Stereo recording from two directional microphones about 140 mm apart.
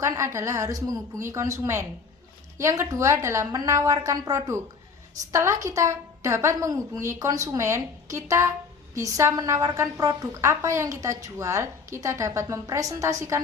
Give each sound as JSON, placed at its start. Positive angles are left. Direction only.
{"t": 0.0, "sound": "a woman's voice", "side_deg": -20}